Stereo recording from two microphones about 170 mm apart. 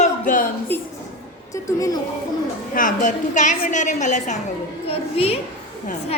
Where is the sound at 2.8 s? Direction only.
50° left (ahead or behind).